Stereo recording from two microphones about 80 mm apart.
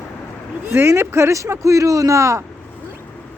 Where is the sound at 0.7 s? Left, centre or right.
Right.